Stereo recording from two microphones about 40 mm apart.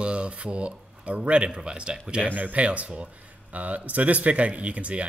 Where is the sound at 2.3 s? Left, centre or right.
Right.